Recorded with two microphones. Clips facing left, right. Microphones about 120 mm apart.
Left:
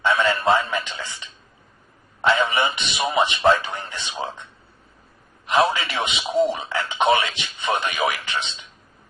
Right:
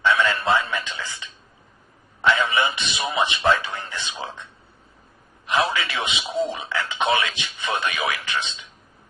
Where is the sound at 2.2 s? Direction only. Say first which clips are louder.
Left 1 dB; 30° left (ahead or behind).